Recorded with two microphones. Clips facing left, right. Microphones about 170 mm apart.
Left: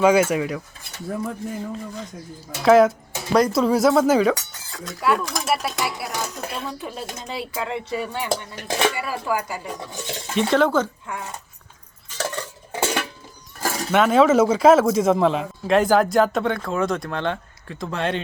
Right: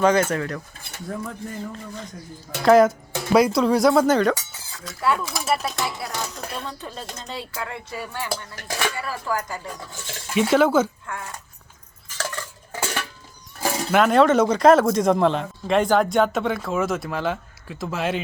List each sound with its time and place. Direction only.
0.0 s speech: 10° left (ahead or behind)
10.3 s speech: 5° right (ahead or behind)
11.0 s speech: 20° left (ahead or behind)
12.1 s dishes: 20° left (ahead or behind)
13.6 s speech: centre (ahead or behind)